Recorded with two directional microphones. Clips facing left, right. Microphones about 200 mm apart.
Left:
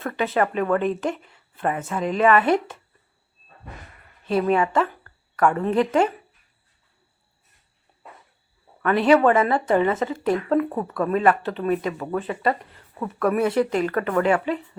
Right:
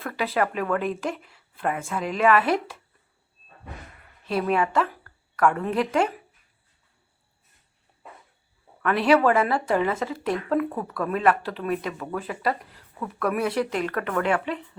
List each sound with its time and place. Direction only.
0.0 s speech: centre (ahead or behind)
4.3 s speech: centre (ahead or behind)
8.8 s speech: centre (ahead or behind)